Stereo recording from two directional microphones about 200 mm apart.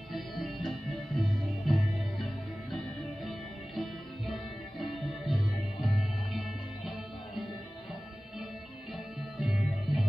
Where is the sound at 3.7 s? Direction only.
Centre (ahead or behind).